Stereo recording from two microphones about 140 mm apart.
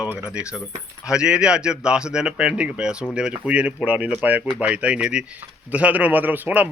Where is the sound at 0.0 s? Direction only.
10° right (ahead or behind).